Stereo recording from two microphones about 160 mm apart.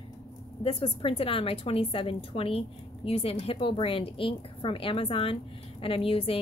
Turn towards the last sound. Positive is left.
turn(degrees=35)  # may be behind; listen again after turning